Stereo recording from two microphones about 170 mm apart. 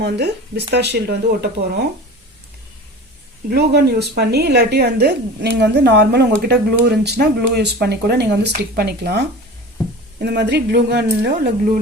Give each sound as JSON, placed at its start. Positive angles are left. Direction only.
{"t": 0.0, "sound": "a woman's voice", "side_deg": -80}
{"t": 3.5, "sound": "a woman's voice", "side_deg": -70}
{"t": 8.5, "sound": "a woman's voice", "side_deg": -65}
{"t": 10.2, "sound": "a woman's voice", "side_deg": -80}